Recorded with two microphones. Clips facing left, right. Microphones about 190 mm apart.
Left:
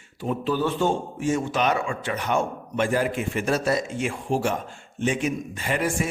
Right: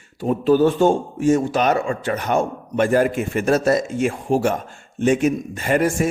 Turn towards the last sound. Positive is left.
turn(degrees=-45)  # may be behind; listen again after turning